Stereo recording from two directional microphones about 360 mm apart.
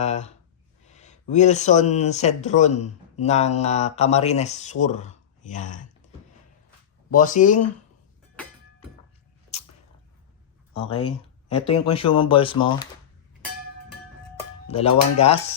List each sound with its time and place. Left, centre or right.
0.0 s speech: centre
7.1 s speech: left
10.8 s speech: centre
14.7 s speech: centre